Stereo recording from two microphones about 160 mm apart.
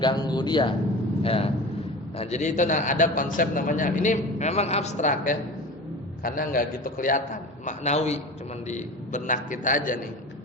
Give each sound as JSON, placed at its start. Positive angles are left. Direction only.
{"t": 0.0, "sound": "a man's voice", "side_deg": 25}
{"t": 2.1, "sound": "a man's voice", "side_deg": 45}
{"t": 7.6, "sound": "a man's voice", "side_deg": 45}